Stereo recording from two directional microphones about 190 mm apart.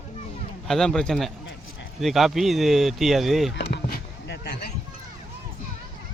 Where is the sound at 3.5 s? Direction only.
65° left (ahead or behind).